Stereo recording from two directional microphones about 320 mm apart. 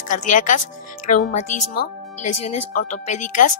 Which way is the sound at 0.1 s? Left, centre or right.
Left.